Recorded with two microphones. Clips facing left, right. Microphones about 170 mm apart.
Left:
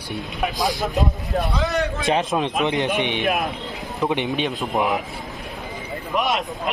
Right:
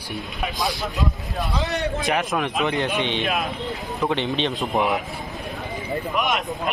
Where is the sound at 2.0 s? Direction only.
25° left (ahead or behind); by 4.9 s 5° left (ahead or behind).